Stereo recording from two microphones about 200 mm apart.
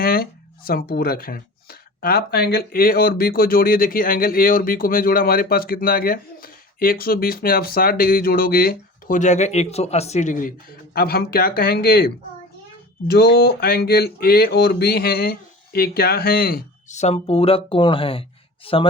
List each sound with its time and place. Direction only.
0.0 s speech: 50° left (ahead or behind)
16.9 s a woman's voice: 35° left (ahead or behind)